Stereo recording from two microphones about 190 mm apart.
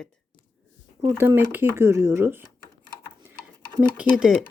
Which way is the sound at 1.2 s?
10° right (ahead or behind).